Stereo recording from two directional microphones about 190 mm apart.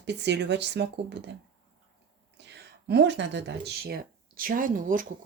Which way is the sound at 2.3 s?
65° right (ahead or behind).